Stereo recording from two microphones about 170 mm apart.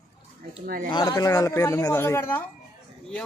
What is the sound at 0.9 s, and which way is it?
A man's voice, 25° left (ahead or behind).